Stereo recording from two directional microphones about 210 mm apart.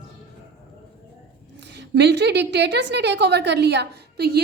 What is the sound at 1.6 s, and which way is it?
A woman's voice, 55° right (ahead or behind).